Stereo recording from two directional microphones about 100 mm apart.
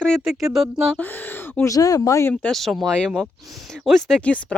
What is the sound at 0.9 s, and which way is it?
Speech, 20° left (ahead or behind).